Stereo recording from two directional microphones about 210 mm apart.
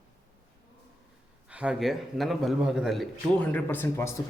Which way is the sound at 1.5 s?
5° right (ahead or behind).